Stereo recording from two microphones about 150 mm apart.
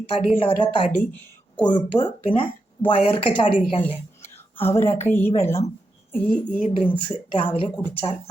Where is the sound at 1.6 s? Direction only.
30° left (ahead or behind).